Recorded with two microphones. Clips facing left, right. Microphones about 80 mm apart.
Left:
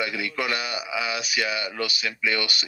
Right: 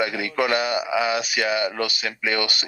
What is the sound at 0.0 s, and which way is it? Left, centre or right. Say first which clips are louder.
A man's voice: right 5 dB; right.